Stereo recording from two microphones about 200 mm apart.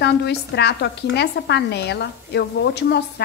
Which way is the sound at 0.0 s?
55° left (ahead or behind).